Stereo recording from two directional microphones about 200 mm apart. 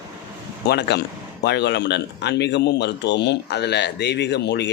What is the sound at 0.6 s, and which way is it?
Speech, 55° left (ahead or behind).